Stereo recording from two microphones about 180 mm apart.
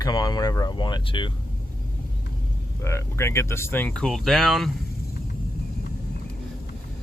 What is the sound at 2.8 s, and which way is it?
Speech, 15° left (ahead or behind).